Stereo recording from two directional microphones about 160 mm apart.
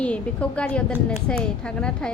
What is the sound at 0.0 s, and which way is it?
A woman's voice, 10° left (ahead or behind).